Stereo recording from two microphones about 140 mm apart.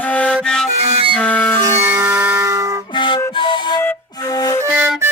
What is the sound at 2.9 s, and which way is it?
Music, 35° left (ahead or behind).